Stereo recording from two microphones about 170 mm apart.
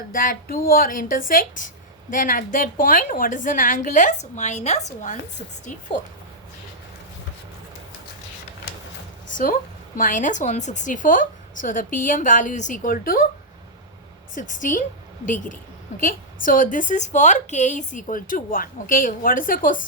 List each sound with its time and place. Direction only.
0.1 s a woman's voice: 55° left (ahead or behind)
9.3 s a woman's voice: 55° left (ahead or behind)
14.3 s a woman's voice: 50° left (ahead or behind)
16.0 s a woman's voice: 55° left (ahead or behind)